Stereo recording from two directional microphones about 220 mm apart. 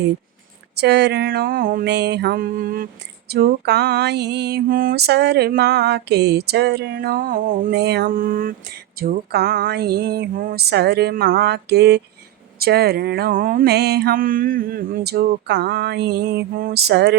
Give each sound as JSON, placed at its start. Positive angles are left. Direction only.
{"t": 0.8, "sound": "mantra", "side_deg": -50}